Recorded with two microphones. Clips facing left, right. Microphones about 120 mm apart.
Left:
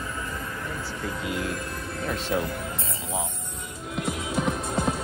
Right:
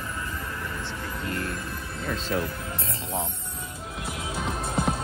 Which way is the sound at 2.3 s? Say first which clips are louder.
Left 1 dB; 15° left (ahead or behind).